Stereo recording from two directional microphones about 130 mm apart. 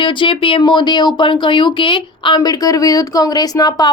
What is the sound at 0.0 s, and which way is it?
A woman's voice, 40° left (ahead or behind).